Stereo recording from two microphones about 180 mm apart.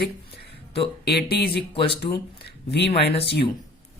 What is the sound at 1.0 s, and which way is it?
Speech, 60° left (ahead or behind).